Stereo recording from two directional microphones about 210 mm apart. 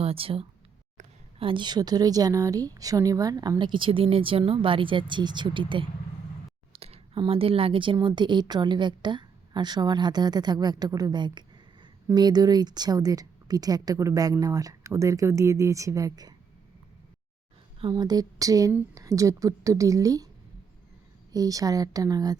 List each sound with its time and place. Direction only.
0.0 s a woman's voice: 25° right (ahead or behind)
17.7 s a woman's voice: 20° right (ahead or behind)
21.3 s a woman's voice: 15° right (ahead or behind)